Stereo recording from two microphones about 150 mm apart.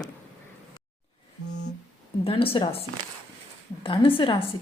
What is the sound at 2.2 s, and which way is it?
A woman's voice, 40° left (ahead or behind).